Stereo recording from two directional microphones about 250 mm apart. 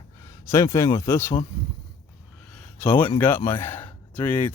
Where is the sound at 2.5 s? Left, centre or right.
Centre.